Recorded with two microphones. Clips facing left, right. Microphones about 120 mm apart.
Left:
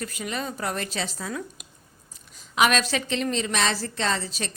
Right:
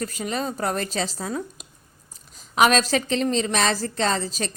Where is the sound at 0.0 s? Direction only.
40° right (ahead or behind).